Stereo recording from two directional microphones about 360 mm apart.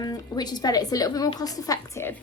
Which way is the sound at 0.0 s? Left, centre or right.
Centre.